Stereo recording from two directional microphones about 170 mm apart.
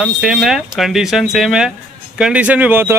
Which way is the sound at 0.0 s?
5° right (ahead or behind).